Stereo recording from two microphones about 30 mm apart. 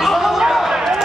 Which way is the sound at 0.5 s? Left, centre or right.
Centre.